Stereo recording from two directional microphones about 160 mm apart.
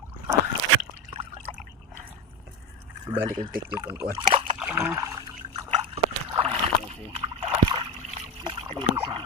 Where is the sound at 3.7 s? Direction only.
15° right (ahead or behind).